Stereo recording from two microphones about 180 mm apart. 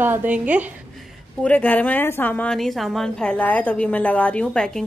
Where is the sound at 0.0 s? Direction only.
10° right (ahead or behind).